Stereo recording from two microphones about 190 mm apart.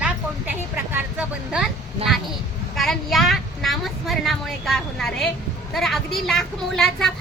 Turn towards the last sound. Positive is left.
turn(degrees=0)  # may be behind; listen again after turning